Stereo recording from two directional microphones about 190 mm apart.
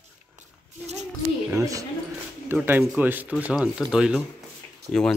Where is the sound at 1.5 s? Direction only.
15° right (ahead or behind).